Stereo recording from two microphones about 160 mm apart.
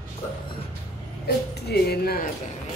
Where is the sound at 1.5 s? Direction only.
90° left; by 2.3 s 70° left (ahead or behind).